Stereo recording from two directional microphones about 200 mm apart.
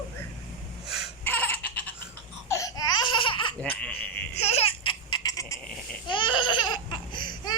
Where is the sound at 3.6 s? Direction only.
5° left (ahead or behind).